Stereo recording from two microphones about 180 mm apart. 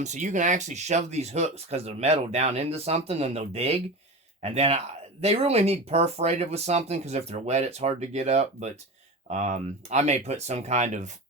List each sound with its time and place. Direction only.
0.0 s speech: 40° right (ahead or behind)